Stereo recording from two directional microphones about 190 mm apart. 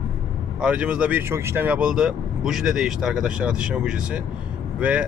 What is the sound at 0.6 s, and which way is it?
Speech, 5° right (ahead or behind).